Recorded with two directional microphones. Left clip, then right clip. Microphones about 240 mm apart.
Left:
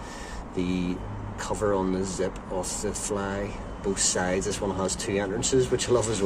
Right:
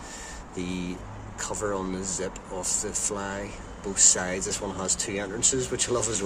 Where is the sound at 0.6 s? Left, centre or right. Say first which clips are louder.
Left 4 dB; centre.